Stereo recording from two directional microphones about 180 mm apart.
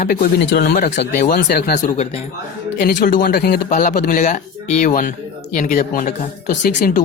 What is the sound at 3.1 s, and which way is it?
Speech, 65° left (ahead or behind).